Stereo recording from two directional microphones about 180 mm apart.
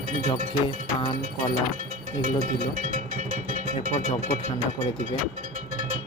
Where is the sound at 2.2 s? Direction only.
45° right (ahead or behind).